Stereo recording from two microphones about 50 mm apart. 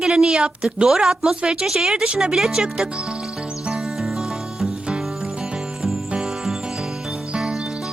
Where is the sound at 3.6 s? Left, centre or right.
Centre.